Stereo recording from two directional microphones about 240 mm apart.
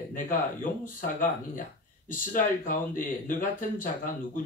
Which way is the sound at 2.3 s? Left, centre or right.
Left.